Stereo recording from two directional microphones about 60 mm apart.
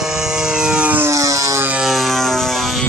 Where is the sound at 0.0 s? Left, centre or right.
Centre.